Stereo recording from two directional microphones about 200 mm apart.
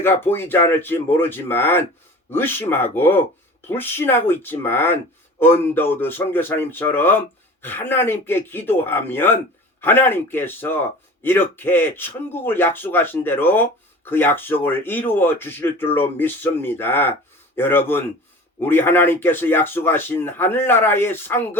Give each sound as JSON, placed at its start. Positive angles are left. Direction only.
{"t": 0.0, "sound": "speech", "side_deg": 10}